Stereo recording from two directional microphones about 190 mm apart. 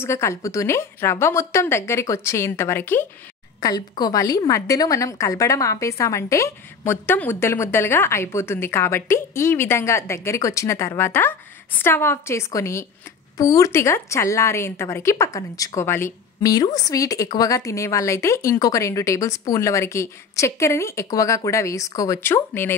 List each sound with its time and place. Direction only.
0.0 s speech: 15° left (ahead or behind)